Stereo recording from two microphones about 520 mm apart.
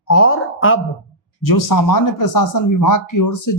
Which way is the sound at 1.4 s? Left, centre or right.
Left.